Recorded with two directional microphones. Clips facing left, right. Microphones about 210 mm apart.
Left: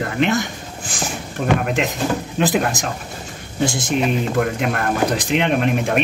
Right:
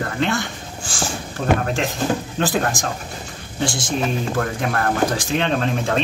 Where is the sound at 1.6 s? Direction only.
20° left (ahead or behind).